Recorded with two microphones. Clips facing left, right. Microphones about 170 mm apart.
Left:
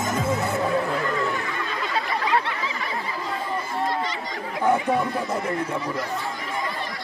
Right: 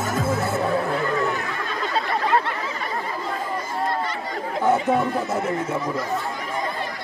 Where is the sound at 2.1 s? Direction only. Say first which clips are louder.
Right 2 dB; 45° right (ahead or behind).